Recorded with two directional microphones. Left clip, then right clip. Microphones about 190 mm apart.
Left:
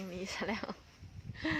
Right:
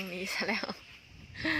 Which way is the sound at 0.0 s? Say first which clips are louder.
Right 5 dB; centre (ahead or behind).